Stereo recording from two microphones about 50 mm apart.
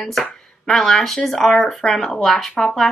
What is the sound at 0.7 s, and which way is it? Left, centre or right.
Speech, centre.